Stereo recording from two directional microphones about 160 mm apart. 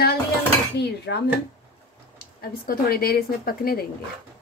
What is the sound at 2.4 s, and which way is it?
A woman's voice, 70° left (ahead or behind).